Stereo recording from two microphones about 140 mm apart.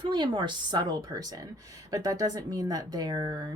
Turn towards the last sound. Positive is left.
turn(degrees=-30)  # may be behind; listen again after turning